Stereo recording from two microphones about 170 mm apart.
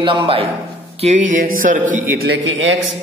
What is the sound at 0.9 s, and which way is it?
Music, 40° right (ahead or behind).